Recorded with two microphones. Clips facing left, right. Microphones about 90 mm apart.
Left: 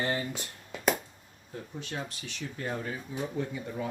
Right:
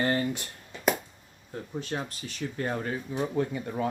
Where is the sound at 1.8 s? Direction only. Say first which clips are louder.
Right 5 dB; 40° right (ahead or behind).